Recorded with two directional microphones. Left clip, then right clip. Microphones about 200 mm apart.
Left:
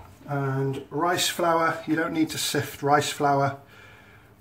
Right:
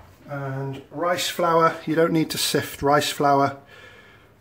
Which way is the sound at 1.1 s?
45° right (ahead or behind).